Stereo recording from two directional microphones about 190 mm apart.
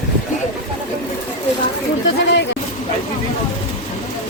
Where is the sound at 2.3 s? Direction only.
70° left (ahead or behind).